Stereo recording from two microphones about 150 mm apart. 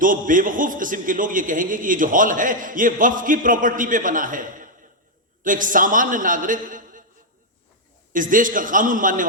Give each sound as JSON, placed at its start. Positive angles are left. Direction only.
{"t": 0.0, "sound": "a man's voice", "side_deg": -65}
{"t": 8.1, "sound": "a man's voice", "side_deg": -65}